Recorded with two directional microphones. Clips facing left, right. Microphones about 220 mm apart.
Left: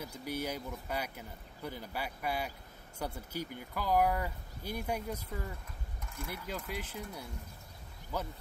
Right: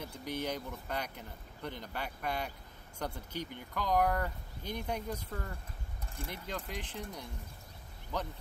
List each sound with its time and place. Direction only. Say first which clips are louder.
0.0 s speech: even; 10° left (ahead or behind)
6.0 s a sound: even; 30° right (ahead or behind)
6.4 s speech: left 1 dB; 5° left (ahead or behind)
8.1 s speech: even; 5° left (ahead or behind)